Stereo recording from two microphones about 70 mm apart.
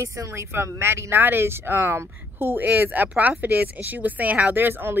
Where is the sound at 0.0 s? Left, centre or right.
Right.